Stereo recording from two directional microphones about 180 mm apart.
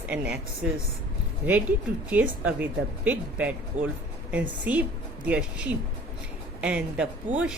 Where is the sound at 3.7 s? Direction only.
45° right (ahead or behind).